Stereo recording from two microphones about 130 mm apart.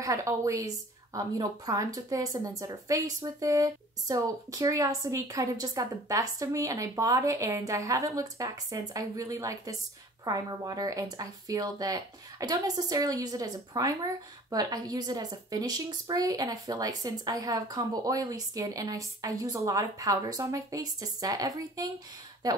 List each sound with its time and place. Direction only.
0.0 s a woman's voice: 25° right (ahead or behind)